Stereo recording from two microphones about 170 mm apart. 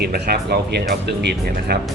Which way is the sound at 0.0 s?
65° right (ahead or behind).